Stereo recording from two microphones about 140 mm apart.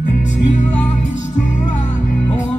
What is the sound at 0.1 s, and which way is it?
Music, 60° left (ahead or behind).